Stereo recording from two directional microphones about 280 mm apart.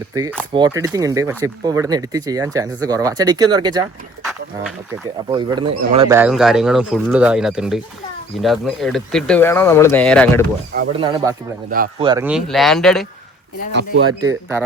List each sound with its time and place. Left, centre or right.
0.5 s speech: centre
5.3 s speech: centre
10.8 s speech: centre
11.7 s speech: right
12.0 s speech: centre
14.1 s speech: centre